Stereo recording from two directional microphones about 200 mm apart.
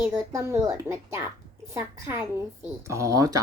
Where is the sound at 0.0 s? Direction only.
15° right (ahead or behind).